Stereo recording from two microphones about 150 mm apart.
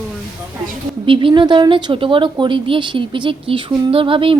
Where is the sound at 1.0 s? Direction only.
35° right (ahead or behind).